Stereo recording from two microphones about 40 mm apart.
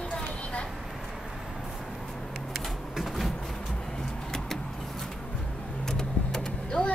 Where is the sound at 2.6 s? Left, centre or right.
Centre.